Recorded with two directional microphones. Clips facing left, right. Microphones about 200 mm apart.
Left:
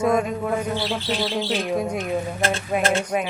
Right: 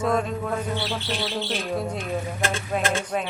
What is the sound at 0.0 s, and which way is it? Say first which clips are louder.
Bird: left 3 dB; 10° left (ahead or behind).